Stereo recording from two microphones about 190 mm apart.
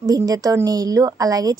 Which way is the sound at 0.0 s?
20° right (ahead or behind).